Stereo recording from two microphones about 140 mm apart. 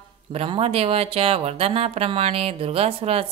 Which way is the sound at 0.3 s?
45° right (ahead or behind).